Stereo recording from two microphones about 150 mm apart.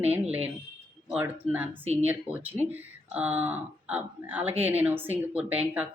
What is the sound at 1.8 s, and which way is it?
Speech, 45° right (ahead or behind).